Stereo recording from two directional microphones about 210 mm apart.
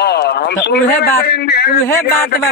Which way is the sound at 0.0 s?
50° left (ahead or behind).